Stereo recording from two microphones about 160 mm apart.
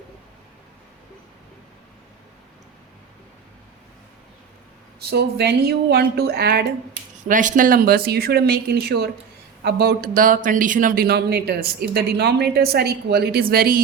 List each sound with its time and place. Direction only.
5.0 s speech: 90° right
7.3 s speech: 55° right (ahead or behind)